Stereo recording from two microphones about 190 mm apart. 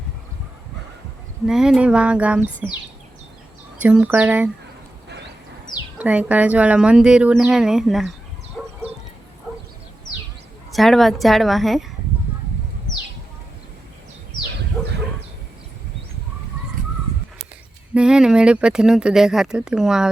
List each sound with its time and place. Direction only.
1.5 s speech: centre (ahead or behind)
3.8 s speech: 10° right (ahead or behind)
5.0 s dog: 65° right (ahead or behind)
6.0 s speech: 5° right (ahead or behind)
8.6 s bow-wow: centre (ahead or behind)
10.7 s speech: centre (ahead or behind)
14.8 s bow-wow: centre (ahead or behind)
17.9 s speech: 5° right (ahead or behind)